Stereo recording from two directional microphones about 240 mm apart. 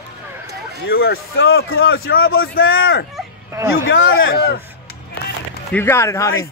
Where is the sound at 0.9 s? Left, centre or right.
Left.